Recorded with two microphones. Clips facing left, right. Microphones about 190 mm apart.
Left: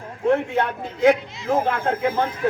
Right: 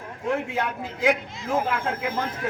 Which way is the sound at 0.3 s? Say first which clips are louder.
Left 6 dB; 60° left (ahead or behind).